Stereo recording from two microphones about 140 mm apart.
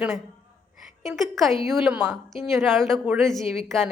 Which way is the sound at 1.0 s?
Centre (ahead or behind).